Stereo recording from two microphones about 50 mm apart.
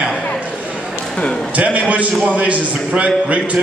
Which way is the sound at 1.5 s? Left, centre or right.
Right.